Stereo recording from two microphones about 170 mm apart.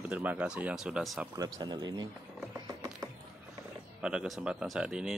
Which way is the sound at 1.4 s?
25° right (ahead or behind).